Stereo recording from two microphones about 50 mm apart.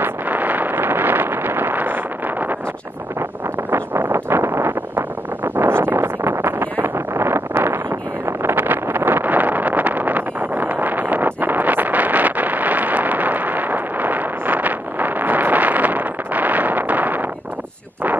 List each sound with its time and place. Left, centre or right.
0.0 s wind noise: right
3.7 s vehicle: right
5.4 s wind noise: right
8.3 s vehicle: right
8.5 s vehicle: right